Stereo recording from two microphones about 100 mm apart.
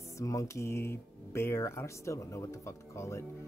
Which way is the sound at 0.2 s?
35° left (ahead or behind).